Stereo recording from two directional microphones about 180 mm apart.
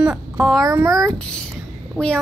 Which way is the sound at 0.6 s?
15° right (ahead or behind).